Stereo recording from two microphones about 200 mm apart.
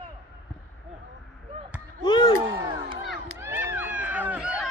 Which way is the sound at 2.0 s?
20° left (ahead or behind).